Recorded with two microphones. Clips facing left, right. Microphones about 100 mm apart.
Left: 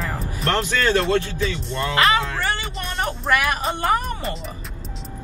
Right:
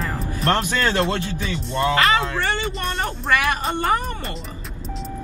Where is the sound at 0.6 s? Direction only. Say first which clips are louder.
Left 1 dB; 20° right (ahead or behind).